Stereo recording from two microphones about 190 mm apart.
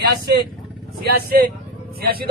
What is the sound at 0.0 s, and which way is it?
Vehicle, 55° right (ahead or behind).